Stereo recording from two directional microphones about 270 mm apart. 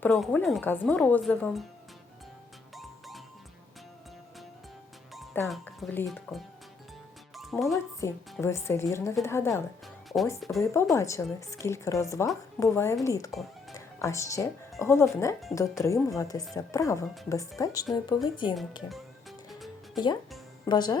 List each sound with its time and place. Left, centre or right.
0.0 s a woman's voice: centre
2.7 s music: centre
5.1 s speech: centre
7.3 s music: centre
8.0 s speech: centre
10.6 s speech: centre
13.7 s music: centre
14.8 s speech: centre
18.9 s music: centre
20.7 s speech: centre